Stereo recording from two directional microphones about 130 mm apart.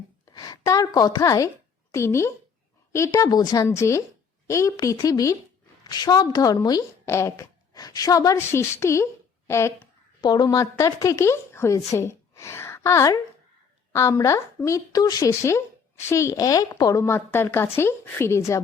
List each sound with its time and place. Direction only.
0.3 s a woman's voice: 30° left (ahead or behind)
10.2 s speech: 30° left (ahead or behind)